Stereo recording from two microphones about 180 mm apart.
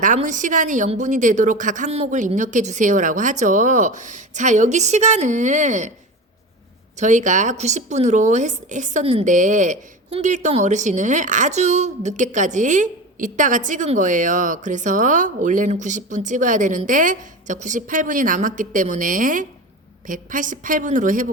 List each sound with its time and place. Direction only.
0.0 s speech: 45° right (ahead or behind)
7.0 s speech: 45° right (ahead or behind)